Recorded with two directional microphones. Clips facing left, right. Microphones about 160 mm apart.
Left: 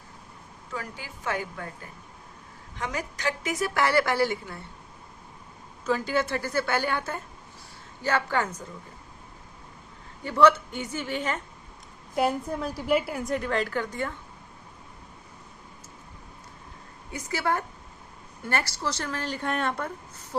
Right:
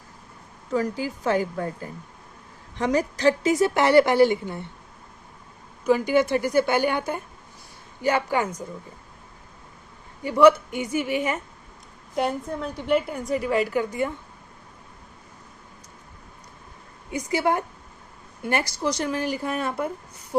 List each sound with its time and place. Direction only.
0.7 s a woman's voice: 40° right (ahead or behind); by 4.6 s 20° right (ahead or behind)
5.8 s a woman's voice: 15° right (ahead or behind)
10.2 s a woman's voice: 10° right (ahead or behind)
12.1 s a woman's voice: 5° left (ahead or behind); by 14.1 s 10° right (ahead or behind)
17.1 s a woman's voice: 15° right (ahead or behind)